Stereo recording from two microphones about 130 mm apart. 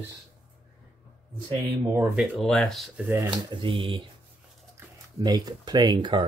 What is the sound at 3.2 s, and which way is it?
Speech, 40° right (ahead or behind).